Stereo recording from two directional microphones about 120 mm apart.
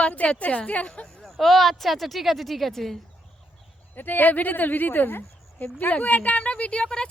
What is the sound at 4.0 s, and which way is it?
Speech, 15° left (ahead or behind).